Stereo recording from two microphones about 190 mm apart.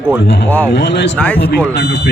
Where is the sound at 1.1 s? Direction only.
5° left (ahead or behind).